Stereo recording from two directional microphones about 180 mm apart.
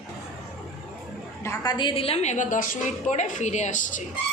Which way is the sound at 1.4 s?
20° left (ahead or behind).